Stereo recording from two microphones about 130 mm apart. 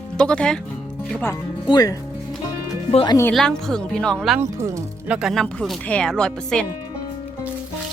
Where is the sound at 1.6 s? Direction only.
30° left (ahead or behind).